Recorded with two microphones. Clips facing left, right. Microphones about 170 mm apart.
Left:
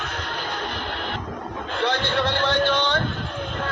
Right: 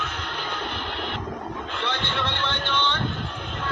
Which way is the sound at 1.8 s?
40° left (ahead or behind).